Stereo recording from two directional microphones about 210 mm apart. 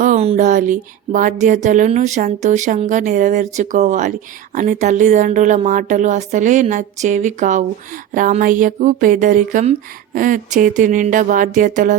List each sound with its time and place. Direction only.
0.0 s speech: 35° right (ahead or behind)